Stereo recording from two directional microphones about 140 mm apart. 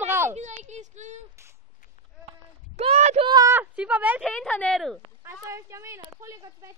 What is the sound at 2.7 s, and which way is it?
Speech, 50° right (ahead or behind).